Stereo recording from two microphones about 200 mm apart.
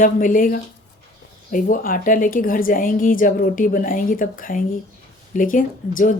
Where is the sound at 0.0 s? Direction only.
40° left (ahead or behind).